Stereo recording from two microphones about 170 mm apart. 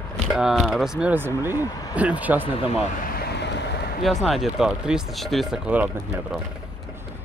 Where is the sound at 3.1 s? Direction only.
70° left (ahead or behind).